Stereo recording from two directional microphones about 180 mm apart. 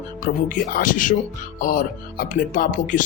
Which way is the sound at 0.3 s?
50° left (ahead or behind).